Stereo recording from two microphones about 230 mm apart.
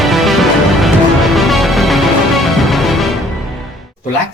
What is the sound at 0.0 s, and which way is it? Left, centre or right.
Music, centre.